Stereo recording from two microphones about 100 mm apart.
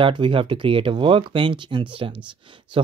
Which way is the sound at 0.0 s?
55° right (ahead or behind).